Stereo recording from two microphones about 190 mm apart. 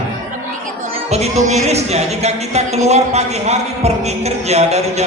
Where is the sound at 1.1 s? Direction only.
35° right (ahead or behind).